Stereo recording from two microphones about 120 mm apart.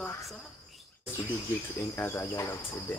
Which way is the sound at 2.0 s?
20° left (ahead or behind).